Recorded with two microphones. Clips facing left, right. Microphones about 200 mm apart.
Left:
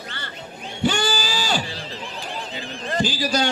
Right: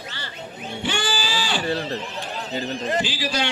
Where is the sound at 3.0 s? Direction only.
40° left (ahead or behind).